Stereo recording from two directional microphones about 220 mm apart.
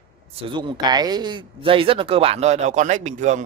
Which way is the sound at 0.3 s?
25° right (ahead or behind).